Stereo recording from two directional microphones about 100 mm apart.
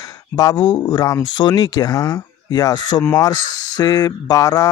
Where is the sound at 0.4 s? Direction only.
45° left (ahead or behind).